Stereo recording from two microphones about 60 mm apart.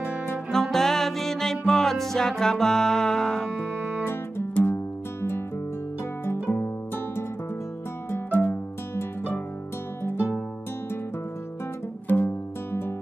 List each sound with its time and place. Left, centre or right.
0.5 s music: centre
4.0 s music: left
8.3 s music: left
12.1 s music: left